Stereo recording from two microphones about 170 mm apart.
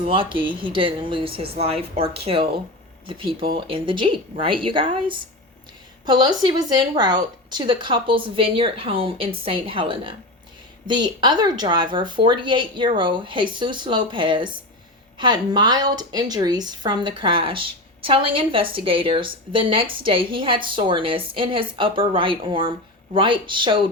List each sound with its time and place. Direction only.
0.0 s a woman's voice: 30° right (ahead or behind)